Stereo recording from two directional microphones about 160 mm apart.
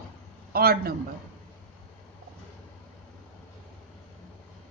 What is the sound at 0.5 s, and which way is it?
Speech, 70° right (ahead or behind).